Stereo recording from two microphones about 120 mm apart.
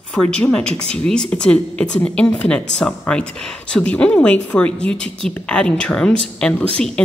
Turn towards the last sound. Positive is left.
turn(degrees=10)  # may be behind; listen again after turning